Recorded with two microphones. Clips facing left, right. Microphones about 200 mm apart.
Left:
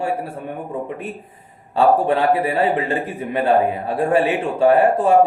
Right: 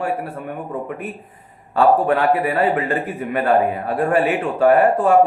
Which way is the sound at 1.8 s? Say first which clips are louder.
Even; 25° left (ahead or behind).